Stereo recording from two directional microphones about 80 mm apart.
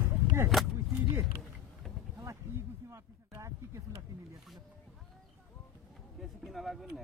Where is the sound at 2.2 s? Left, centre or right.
Right.